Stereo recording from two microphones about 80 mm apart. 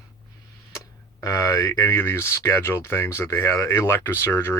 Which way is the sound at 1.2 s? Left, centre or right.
Left.